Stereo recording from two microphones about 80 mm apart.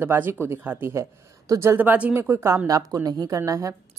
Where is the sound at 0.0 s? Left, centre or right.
Right.